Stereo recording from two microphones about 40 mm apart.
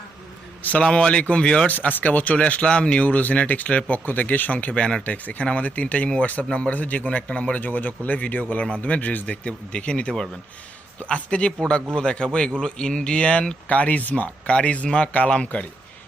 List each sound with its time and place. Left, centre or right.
0.8 s speech: left
1.6 s speech: left
2.5 s speech: left
5.0 s speech: left
13.5 s speech: left